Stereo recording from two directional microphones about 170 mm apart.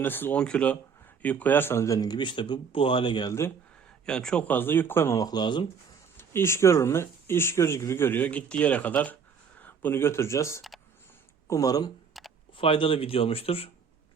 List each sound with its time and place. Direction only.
0.0 s speech: 10° left (ahead or behind)
4.0 s speech: 5° left (ahead or behind); by 5.6 s 25° left (ahead or behind)
6.1 s speech: 15° left (ahead or behind)
12.1 s computer keyboard: centre (ahead or behind)
12.5 s speech: 30° left (ahead or behind)